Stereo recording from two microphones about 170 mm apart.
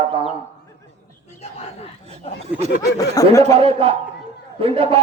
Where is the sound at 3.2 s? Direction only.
20° left (ahead or behind).